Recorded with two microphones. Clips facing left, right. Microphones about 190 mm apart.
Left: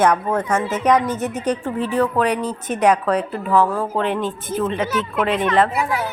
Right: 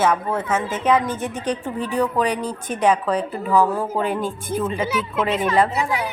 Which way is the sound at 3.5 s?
15° right (ahead or behind).